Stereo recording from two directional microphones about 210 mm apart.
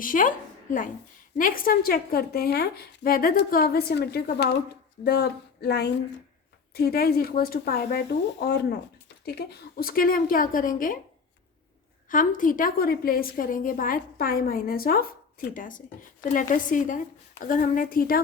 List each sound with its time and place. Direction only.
0.0 s a woman's voice: 40° left (ahead or behind)
12.0 s a woman's voice: 40° left (ahead or behind)